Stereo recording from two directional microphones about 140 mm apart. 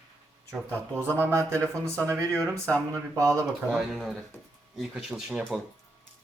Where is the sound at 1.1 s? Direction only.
20° right (ahead or behind).